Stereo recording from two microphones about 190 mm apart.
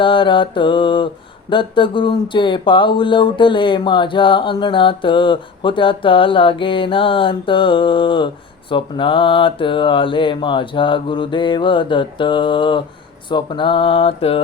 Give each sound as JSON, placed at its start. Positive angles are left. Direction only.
{"t": 0.0, "sound": "speech", "side_deg": 25}